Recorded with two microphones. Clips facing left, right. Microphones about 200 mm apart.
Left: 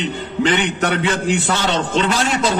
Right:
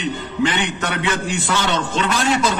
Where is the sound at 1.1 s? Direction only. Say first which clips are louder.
Left 3 dB; 30° left (ahead or behind).